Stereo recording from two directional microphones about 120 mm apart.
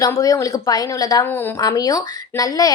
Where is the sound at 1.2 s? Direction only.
20° left (ahead or behind).